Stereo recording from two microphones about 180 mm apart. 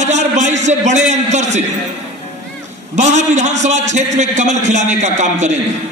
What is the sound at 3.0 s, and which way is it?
A man's voice, 40° right (ahead or behind).